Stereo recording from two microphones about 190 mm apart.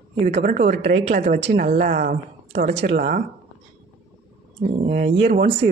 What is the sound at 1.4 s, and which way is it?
Speech, 50° right (ahead or behind).